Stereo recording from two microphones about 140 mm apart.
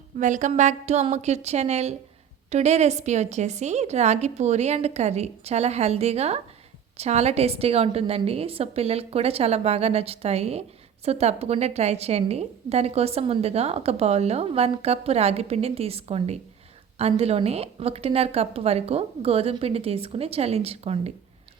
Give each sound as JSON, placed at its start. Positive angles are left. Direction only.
{"t": 0.2, "sound": "a woman's voice", "side_deg": -65}